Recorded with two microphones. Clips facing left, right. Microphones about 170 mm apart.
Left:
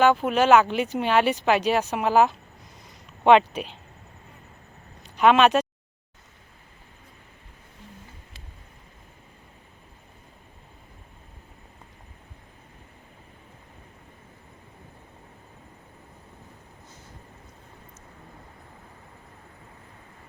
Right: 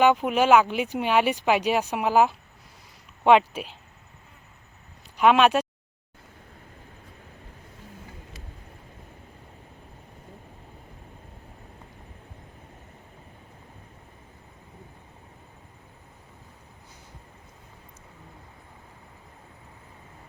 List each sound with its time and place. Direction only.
0.0 s speech: 15° right (ahead or behind)
5.1 s speech: 5° right (ahead or behind)